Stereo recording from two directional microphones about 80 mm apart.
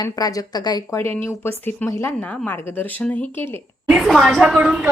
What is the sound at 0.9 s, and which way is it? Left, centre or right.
Speech, left.